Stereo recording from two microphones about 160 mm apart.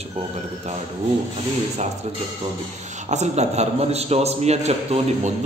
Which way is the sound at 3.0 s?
45° right (ahead or behind).